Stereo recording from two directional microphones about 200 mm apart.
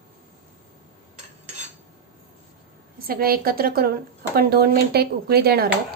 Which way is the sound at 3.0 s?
50° right (ahead or behind).